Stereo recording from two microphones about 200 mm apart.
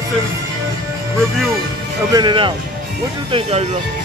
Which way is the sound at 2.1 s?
25° right (ahead or behind).